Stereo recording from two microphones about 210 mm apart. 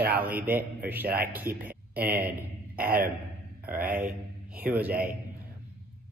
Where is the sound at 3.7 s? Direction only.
40° right (ahead or behind).